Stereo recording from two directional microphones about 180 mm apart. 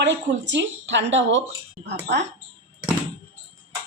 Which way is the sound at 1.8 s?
70° right (ahead or behind).